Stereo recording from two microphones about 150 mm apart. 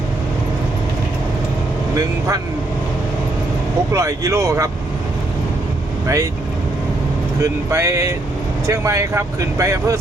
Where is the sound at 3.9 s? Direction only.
20° right (ahead or behind).